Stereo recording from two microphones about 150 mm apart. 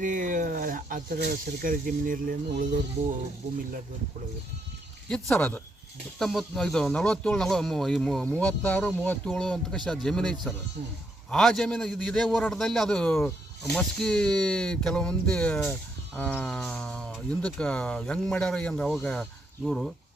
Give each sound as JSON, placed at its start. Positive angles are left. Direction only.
{"t": 0.0, "sound": "speech", "side_deg": -60}
{"t": 3.0, "sound": "speech", "side_deg": -55}
{"t": 5.0, "sound": "speech", "side_deg": 10}